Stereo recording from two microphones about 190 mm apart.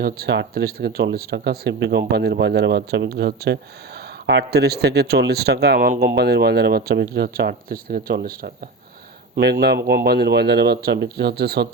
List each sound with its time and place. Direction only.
0.0 s speech: 60° right (ahead or behind)